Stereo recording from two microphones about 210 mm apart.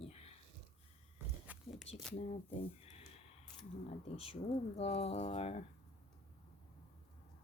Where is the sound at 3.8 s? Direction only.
30° left (ahead or behind).